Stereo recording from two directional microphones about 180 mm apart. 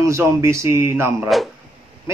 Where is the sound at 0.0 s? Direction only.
15° right (ahead or behind).